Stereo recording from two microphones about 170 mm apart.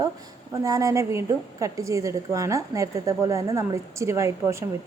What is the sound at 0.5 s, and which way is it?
A woman's voice, 20° right (ahead or behind).